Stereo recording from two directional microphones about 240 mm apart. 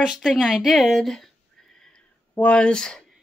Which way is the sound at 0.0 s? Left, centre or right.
Centre.